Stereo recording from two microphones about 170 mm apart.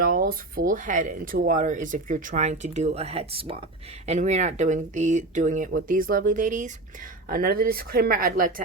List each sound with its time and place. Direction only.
0.0 s speech: 55° right (ahead or behind)